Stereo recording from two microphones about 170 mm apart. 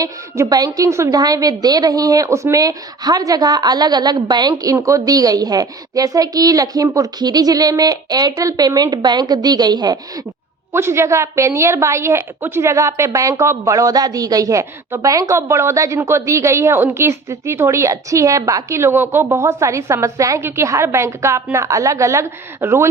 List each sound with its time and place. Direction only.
0.0 s a woman's voice: 20° right (ahead or behind)